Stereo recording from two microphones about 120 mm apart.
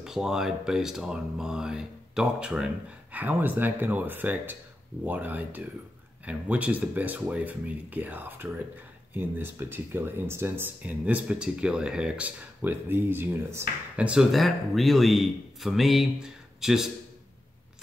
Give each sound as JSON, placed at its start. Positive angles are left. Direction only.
{"t": 0.0, "sound": "speech", "side_deg": -5}
{"t": 13.9, "sound": "a man's voice", "side_deg": -10}